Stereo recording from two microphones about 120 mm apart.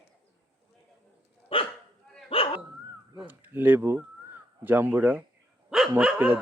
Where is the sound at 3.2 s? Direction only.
15° right (ahead or behind).